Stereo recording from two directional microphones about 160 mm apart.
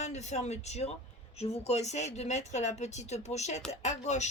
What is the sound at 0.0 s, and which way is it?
Speech, 45° left (ahead or behind).